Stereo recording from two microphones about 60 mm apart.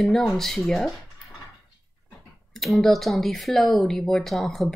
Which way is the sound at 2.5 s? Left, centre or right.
Centre.